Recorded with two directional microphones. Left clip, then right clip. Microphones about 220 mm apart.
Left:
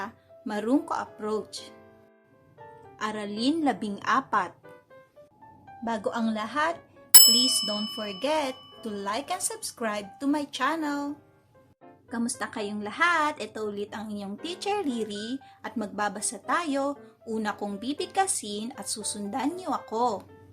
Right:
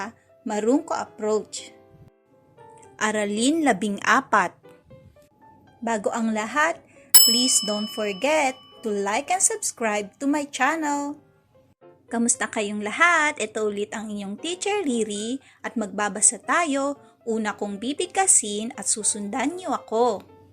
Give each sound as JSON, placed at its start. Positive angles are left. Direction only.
{"t": 0.0, "sound": "a woman's voice", "side_deg": -15}
{"t": 3.0, "sound": "a woman's voice", "side_deg": -20}
{"t": 5.8, "sound": "a woman's voice", "side_deg": -20}
{"t": 7.1, "sound": "bicycle bell", "side_deg": 0}
{"t": 7.9, "sound": "a woman's voice", "side_deg": -20}
{"t": 8.5, "sound": "music", "side_deg": 0}
{"t": 8.8, "sound": "a woman's voice", "side_deg": -20}